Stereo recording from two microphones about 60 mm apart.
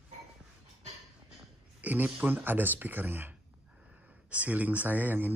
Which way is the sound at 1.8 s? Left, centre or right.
Right.